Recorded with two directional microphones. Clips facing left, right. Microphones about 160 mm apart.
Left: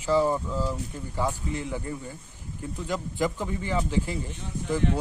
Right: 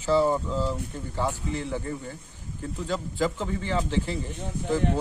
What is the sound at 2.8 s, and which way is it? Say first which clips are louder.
Speech: right 1 dB; 15° left (ahead or behind).